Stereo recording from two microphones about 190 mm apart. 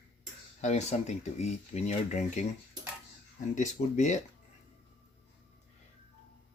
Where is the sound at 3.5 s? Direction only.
40° left (ahead or behind).